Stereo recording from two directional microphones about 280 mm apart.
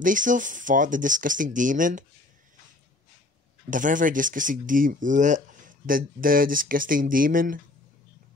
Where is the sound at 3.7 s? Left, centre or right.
Right.